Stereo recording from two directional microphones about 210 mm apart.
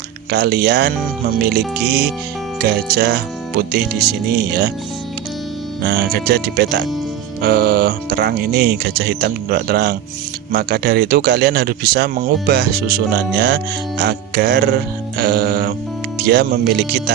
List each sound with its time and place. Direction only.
0.3 s speech: 50° right (ahead or behind)
2.6 s speech: 50° right (ahead or behind)
5.8 s speech: 50° right (ahead or behind)